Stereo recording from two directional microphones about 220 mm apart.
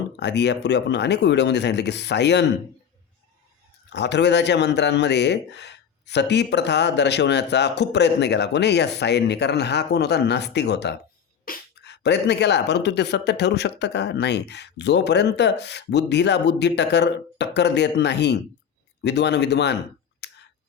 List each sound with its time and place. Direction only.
0.2 s speech: 50° left (ahead or behind)
3.8 s speech: 50° left (ahead or behind)
20.2 s whispering: 50° left (ahead or behind)